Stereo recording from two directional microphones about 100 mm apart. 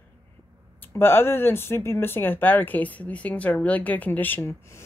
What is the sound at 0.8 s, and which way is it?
Speech, 25° left (ahead or behind).